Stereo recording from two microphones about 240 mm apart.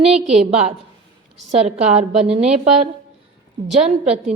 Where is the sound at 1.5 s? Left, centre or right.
Right.